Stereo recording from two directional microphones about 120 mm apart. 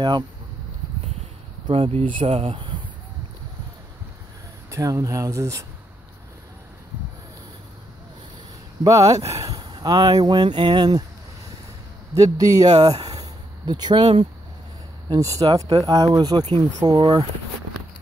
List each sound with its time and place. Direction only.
1.7 s speech: 55° right (ahead or behind)
4.6 s speech: 25° right (ahead or behind)
8.8 s speech: 30° right (ahead or behind)
12.1 s a man's voice: 30° right (ahead or behind)
12.8 s a sound: 35° right (ahead or behind)
15.0 s a man's voice: 30° right (ahead or behind)